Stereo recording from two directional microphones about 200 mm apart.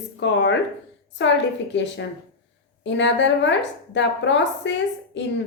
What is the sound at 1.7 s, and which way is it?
A woman's voice, 60° left (ahead or behind).